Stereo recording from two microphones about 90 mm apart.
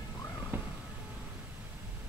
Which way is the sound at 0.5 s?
20° right (ahead or behind).